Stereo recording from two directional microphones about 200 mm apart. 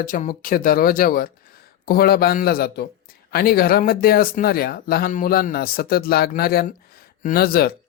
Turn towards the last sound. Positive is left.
turn(degrees=50)  # may be behind; listen again after turning